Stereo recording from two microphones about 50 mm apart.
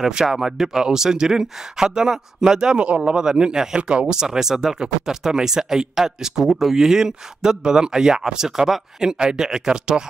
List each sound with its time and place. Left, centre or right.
0.0 s speech: centre